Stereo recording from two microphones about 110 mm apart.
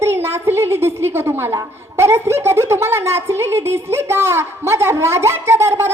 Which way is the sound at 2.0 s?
25° right (ahead or behind).